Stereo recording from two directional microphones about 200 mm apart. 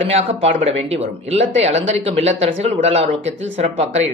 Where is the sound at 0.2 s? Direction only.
30° right (ahead or behind).